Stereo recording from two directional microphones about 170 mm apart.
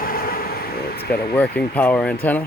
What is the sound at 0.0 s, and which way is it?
Air conditioning, 60° left (ahead or behind).